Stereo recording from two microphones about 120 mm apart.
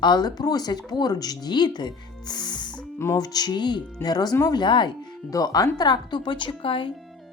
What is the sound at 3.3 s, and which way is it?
Speech, 35° left (ahead or behind).